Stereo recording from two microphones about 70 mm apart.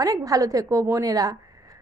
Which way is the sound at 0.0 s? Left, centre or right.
Right.